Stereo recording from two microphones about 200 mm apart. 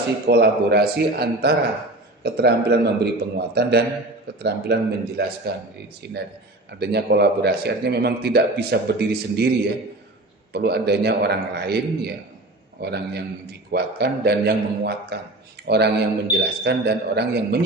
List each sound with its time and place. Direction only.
0.3 s a man's voice: 55° right (ahead or behind)
6.7 s a man's voice: 55° right (ahead or behind)